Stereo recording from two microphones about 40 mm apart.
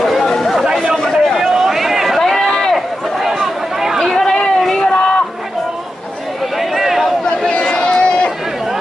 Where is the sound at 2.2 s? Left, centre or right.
Centre.